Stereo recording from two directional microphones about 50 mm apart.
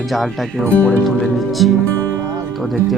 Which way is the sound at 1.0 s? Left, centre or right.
Centre.